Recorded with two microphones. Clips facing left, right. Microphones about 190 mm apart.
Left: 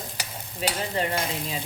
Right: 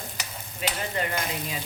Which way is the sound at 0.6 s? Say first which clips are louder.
Left 3 dB; 30° left (ahead or behind).